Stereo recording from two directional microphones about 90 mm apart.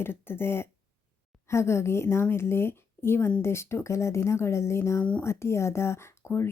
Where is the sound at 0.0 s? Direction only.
25° left (ahead or behind).